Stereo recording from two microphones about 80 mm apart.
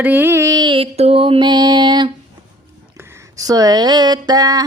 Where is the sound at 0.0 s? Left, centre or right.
Right.